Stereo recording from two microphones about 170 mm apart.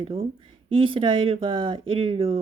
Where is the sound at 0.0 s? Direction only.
35° right (ahead or behind).